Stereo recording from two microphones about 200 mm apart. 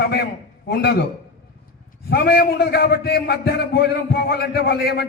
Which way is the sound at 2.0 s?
50° left (ahead or behind).